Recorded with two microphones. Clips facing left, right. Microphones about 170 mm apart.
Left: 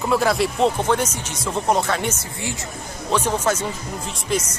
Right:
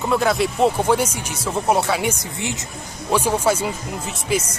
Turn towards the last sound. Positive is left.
turn(degrees=-10)  # may be behind; listen again after turning